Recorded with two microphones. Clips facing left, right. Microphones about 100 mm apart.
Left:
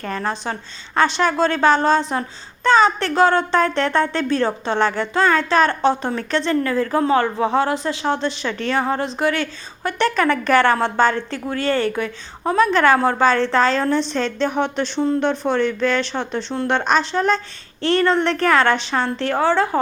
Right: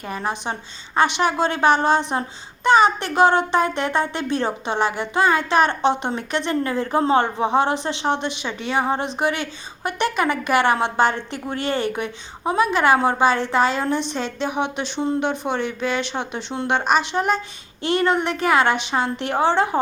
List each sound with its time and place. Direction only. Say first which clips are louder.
0.0 s a woman's voice: left 2 dB; 15° right (ahead or behind)